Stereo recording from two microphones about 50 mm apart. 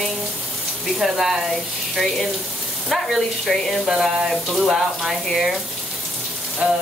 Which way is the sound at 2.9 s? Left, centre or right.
Centre.